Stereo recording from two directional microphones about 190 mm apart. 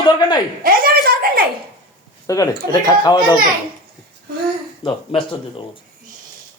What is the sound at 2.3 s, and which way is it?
A man's voice, 15° left (ahead or behind).